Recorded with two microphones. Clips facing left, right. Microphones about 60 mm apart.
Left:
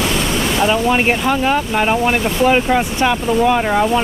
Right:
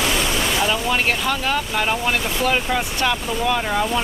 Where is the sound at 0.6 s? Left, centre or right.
Left.